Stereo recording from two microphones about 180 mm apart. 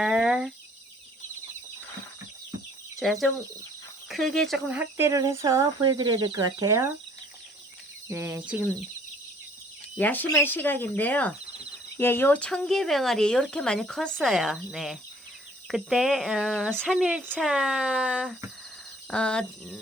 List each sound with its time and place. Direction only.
0.0 s cricket: 5° right (ahead or behind)
3.0 s speech: centre (ahead or behind)
4.8 s speech: 15° right (ahead or behind)
8.0 s speech: 15° right (ahead or behind)
10.0 s speech: 10° left (ahead or behind); by 18.3 s 5° right (ahead or behind)
19.1 s speech: 5° left (ahead or behind)